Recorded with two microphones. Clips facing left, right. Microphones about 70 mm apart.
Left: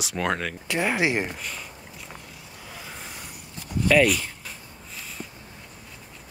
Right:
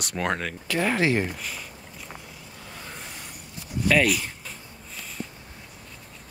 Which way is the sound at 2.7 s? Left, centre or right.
Centre.